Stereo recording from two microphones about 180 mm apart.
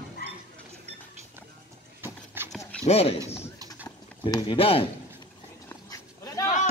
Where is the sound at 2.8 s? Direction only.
35° left (ahead or behind).